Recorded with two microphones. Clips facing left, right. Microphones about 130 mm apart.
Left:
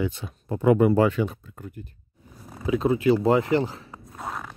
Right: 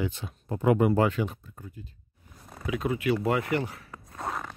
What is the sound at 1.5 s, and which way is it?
Speech, 70° left (ahead or behind).